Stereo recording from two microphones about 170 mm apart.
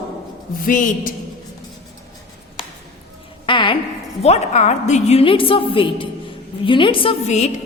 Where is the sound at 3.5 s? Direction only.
30° left (ahead or behind).